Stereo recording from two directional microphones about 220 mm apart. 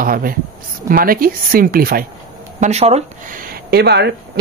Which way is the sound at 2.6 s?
30° right (ahead or behind).